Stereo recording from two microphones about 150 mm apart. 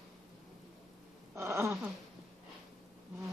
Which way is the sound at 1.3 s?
20° right (ahead or behind).